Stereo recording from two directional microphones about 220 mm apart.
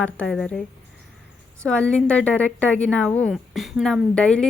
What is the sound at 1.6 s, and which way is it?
A woman's voice, 5° left (ahead or behind).